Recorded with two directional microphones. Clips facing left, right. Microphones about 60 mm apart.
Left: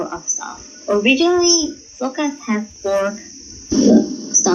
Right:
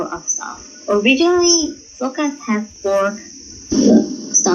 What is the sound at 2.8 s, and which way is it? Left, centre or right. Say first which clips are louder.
Speech: right 2 dB; right.